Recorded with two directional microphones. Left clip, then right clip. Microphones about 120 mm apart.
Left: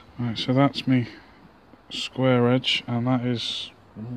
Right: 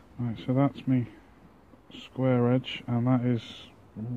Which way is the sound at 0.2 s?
60° left (ahead or behind).